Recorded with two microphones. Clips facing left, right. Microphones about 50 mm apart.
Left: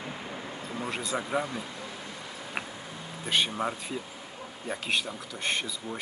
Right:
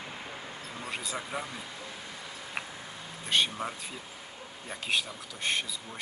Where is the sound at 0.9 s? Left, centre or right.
Centre.